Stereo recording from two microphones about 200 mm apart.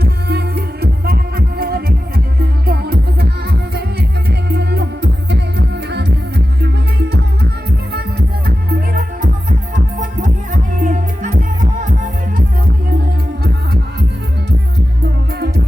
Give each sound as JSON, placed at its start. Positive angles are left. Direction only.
{"t": 0.0, "sound": "music", "side_deg": -55}
{"t": 8.4, "sound": "music", "side_deg": -45}
{"t": 15.3, "sound": "music", "side_deg": -50}